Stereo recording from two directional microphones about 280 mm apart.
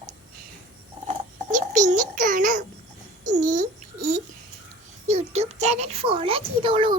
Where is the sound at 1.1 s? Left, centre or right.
Right.